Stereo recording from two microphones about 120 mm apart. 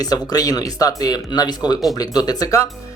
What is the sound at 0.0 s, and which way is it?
Speech, 30° left (ahead or behind).